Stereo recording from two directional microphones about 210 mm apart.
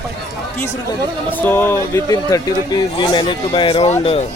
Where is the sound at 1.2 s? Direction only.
10° left (ahead or behind); by 4.2 s 30° left (ahead or behind).